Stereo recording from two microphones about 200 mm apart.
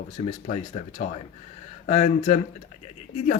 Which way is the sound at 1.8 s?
35° left (ahead or behind).